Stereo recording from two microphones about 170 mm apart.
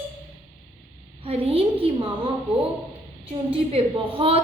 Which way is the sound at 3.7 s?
30° right (ahead or behind).